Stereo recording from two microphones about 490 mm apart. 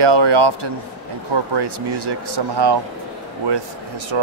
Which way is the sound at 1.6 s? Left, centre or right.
Right.